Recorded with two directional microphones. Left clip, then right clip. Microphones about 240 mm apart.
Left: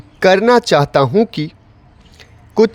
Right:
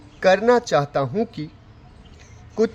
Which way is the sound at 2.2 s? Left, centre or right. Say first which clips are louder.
Left 9 dB; left.